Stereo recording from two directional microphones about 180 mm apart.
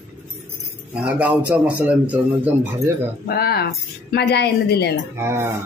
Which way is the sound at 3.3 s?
60° left (ahead or behind).